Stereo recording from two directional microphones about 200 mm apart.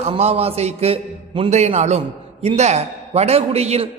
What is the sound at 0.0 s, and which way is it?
A man's voice, 30° right (ahead or behind).